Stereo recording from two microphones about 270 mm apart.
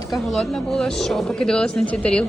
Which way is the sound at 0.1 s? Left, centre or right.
Centre.